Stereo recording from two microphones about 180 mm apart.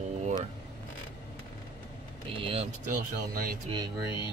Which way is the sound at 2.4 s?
30° right (ahead or behind).